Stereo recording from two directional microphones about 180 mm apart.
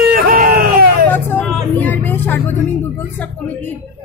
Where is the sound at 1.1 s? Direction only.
10° left (ahead or behind).